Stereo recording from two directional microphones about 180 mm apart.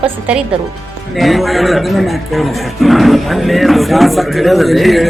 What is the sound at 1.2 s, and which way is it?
A man's voice, centre (ahead or behind).